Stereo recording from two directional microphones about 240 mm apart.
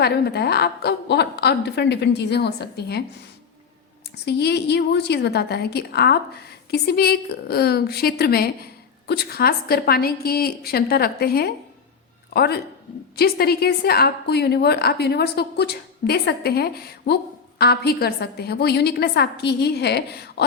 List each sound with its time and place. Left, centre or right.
0.0 s a woman's voice: left
4.3 s a woman's voice: left